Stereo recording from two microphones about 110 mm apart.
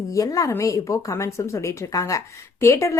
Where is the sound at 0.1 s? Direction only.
30° left (ahead or behind).